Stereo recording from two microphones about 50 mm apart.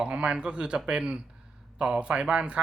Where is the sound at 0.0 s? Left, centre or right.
Right.